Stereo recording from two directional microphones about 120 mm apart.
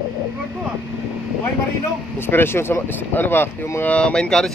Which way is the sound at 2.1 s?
20° left (ahead or behind).